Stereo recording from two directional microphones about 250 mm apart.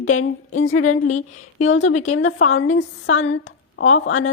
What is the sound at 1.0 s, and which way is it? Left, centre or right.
Speech, left.